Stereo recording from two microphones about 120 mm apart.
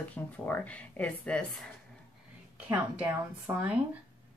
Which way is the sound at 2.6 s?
15° right (ahead or behind).